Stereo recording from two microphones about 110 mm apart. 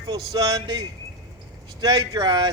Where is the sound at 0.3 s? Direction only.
35° right (ahead or behind).